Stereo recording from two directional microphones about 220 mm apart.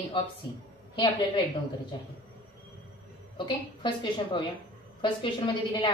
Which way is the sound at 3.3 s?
20° left (ahead or behind).